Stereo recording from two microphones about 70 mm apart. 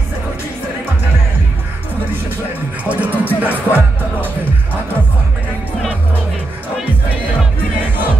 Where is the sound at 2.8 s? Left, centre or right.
Right.